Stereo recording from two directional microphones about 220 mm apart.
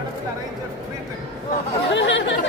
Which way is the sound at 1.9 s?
55° left (ahead or behind).